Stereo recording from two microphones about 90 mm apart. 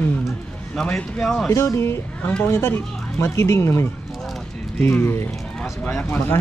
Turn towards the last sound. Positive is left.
turn(degrees=20)  # may be behind; listen again after turning